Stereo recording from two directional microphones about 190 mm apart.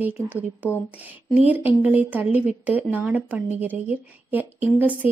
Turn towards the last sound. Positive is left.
turn(degrees=-10)  # may be behind; listen again after turning